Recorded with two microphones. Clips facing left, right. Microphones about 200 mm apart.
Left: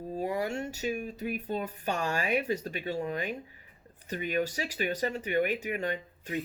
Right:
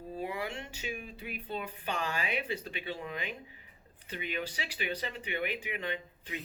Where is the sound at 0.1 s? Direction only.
40° left (ahead or behind).